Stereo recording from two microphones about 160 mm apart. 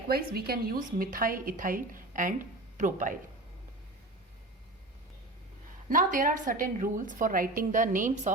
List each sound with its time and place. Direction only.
0.1 s a woman's voice: 75° right (ahead or behind); by 3.2 s 55° right (ahead or behind)
5.9 s a woman's voice: 55° right (ahead or behind)